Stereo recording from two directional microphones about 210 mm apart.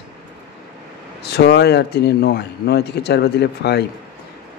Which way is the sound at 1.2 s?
50° left (ahead or behind).